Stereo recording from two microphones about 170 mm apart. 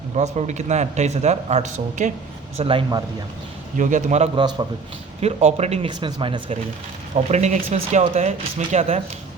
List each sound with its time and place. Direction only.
0.2 s speech: 45° right (ahead or behind)
2.6 s speech: 30° right (ahead or behind)
3.8 s speech: 50° right (ahead or behind)
5.9 s speech: 30° right (ahead or behind)
7.2 s speech: 40° right (ahead or behind)